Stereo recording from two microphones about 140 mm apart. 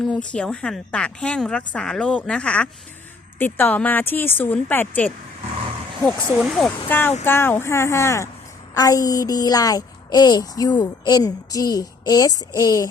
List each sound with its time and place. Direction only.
0.3 s a woman's voice: 5° left (ahead or behind)
6.1 s speech: centre (ahead or behind)
6.8 s a woman's voice: 15° left (ahead or behind)